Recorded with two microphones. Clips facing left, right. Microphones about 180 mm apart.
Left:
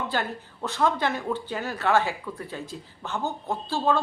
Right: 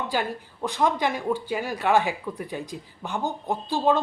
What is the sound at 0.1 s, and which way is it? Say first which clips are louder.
Speech: right 2 dB; 15° right (ahead or behind).